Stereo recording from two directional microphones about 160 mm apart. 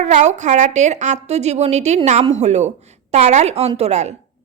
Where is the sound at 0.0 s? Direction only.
45° right (ahead or behind).